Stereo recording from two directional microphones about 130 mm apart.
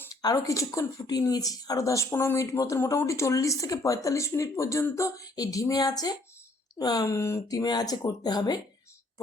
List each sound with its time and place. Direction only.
0.2 s speech: 25° left (ahead or behind)